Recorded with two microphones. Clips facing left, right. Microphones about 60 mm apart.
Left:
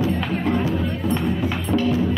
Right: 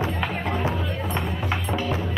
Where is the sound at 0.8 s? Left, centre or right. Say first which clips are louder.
Left 5 dB; centre.